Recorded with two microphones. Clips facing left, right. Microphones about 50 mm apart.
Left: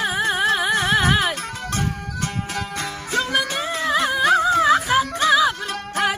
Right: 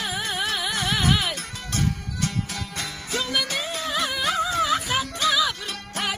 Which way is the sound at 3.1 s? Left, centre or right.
Left.